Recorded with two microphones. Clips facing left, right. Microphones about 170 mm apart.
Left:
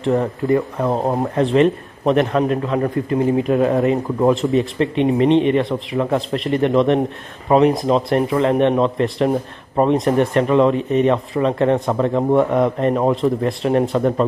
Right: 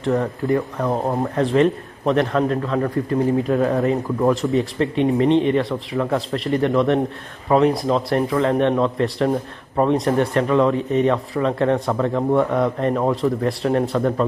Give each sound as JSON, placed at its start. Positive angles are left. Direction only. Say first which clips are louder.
{"t": 0.0, "sound": "speech", "louder": "left 2 dB", "side_deg": 20}